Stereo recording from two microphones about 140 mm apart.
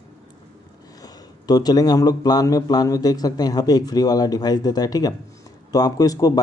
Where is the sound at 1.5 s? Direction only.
25° left (ahead or behind).